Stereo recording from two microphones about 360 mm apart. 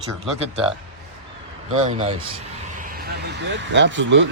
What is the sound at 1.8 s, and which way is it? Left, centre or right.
Speech, centre.